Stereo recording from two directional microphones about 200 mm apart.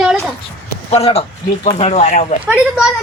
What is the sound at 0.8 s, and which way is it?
A man's voice, 30° left (ahead or behind).